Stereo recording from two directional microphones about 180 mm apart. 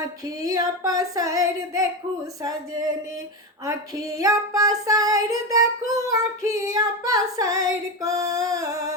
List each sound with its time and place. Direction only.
0.4 s female singing: 20° right (ahead or behind)
3.7 s female singing: 20° right (ahead or behind)